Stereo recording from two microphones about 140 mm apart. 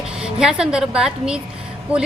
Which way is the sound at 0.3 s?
5° right (ahead or behind).